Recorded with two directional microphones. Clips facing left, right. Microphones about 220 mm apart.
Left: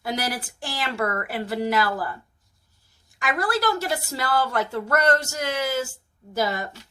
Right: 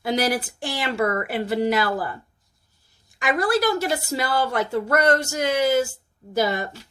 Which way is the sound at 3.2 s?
15° right (ahead or behind).